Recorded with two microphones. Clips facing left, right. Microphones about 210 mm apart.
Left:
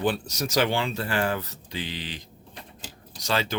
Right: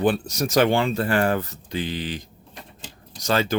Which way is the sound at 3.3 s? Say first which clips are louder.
Right 5 dB; 45° right (ahead or behind).